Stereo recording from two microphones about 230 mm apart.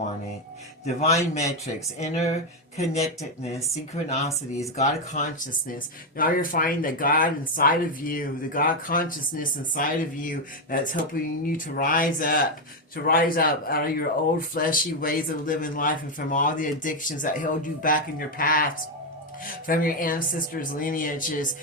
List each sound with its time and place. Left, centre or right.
1.0 s speech: left
4.8 s speech: left